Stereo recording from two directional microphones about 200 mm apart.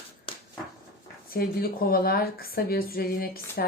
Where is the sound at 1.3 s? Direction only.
50° left (ahead or behind).